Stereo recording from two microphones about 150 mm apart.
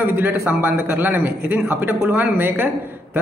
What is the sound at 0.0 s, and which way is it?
A man's voice, 10° right (ahead or behind).